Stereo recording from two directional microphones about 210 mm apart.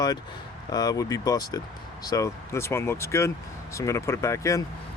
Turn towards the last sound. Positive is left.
turn(degrees=15)  # may be behind; listen again after turning